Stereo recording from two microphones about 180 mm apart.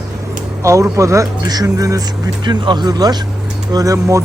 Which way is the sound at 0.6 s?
15° right (ahead or behind).